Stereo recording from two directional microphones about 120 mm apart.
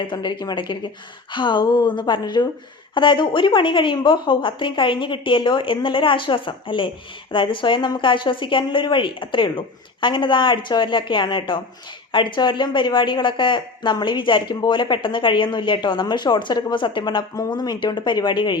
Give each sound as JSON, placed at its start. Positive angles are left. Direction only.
{"t": 0.0, "sound": "speech", "side_deg": 40}